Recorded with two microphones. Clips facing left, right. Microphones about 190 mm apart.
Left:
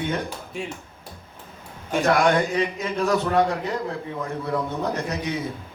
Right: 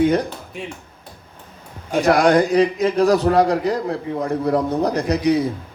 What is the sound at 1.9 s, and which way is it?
A man's voice, 35° right (ahead or behind).